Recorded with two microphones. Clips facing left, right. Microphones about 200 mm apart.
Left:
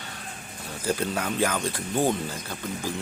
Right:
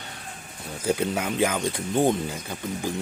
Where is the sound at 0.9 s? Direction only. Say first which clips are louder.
Right 2 dB; 15° right (ahead or behind).